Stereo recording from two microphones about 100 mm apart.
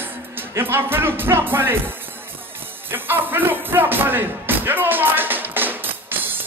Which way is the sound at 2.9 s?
20° right (ahead or behind).